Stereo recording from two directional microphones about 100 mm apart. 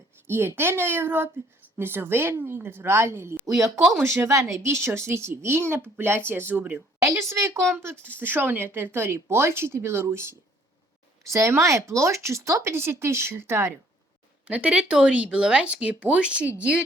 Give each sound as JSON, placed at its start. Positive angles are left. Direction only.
{"t": 0.3, "sound": "speech", "side_deg": -25}
{"t": 7.0, "sound": "speech", "side_deg": -30}
{"t": 14.4, "sound": "speech", "side_deg": -15}